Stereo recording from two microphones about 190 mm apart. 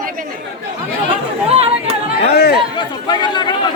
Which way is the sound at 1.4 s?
30° right (ahead or behind).